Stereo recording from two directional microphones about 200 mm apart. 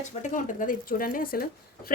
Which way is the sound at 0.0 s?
40° left (ahead or behind).